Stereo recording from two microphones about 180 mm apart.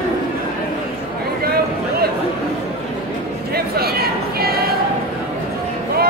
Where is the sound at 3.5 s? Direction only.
60° right (ahead or behind).